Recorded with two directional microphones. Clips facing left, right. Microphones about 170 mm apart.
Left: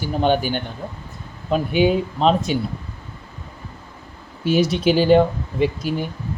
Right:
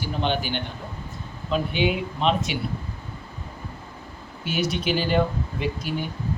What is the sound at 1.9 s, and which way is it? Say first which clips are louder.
Speech: left 6 dB; 35° left (ahead or behind).